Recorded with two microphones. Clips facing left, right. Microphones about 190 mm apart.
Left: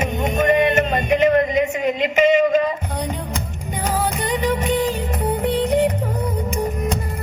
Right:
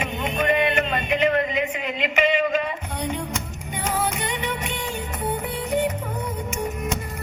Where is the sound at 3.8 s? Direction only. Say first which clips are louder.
Left 3 dB; 35° left (ahead or behind).